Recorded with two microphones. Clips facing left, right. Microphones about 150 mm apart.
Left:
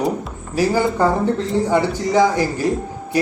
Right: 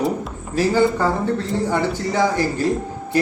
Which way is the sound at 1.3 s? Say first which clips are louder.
Left 3 dB; 15° left (ahead or behind).